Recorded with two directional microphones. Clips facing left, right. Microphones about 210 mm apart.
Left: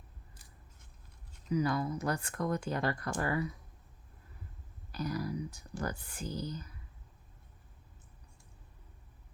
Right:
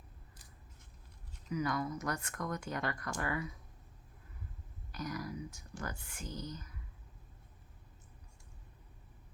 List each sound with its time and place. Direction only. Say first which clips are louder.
1.5 s speech: left 4 dB; 30° left (ahead or behind)
4.9 s speech: left 5 dB; 30° left (ahead or behind)